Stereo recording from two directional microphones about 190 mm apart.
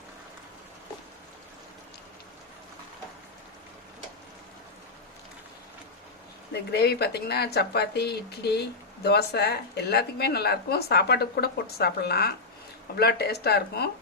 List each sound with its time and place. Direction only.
6.5 s a woman's voice: 60° left (ahead or behind)